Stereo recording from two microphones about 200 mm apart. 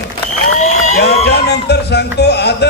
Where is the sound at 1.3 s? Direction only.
55° left (ahead or behind).